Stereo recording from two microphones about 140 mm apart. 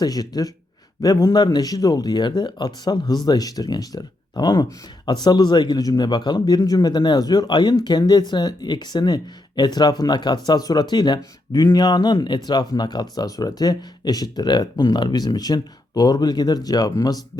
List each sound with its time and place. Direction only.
0.0 s speech: 25° left (ahead or behind)